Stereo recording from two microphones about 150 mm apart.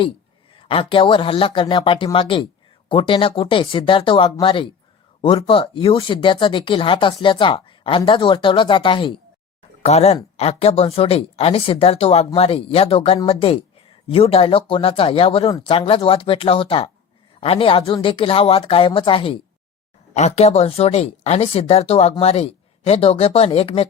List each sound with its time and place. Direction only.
0.5 s speech: 40° left (ahead or behind)
9.8 s a woman's voice: 45° left (ahead or behind)
20.1 s a woman's voice: 45° left (ahead or behind)